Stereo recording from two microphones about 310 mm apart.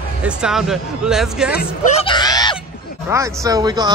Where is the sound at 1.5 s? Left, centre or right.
Left.